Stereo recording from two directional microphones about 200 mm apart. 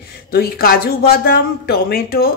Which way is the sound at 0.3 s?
50° left (ahead or behind).